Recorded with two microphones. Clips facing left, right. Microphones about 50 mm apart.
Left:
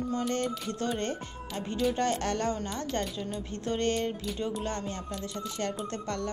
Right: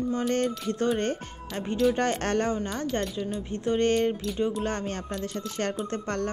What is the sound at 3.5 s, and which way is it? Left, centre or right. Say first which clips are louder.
Speech: right 6 dB; right.